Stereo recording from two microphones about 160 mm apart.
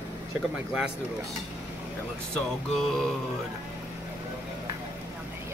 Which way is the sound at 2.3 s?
5° left (ahead or behind).